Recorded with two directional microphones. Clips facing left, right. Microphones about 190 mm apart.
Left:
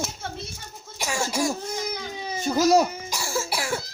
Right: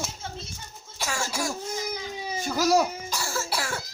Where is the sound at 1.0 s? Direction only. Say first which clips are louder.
Left 4 dB; 15° left (ahead or behind).